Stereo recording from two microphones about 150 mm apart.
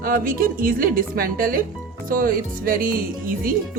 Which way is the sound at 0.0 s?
70° right (ahead or behind).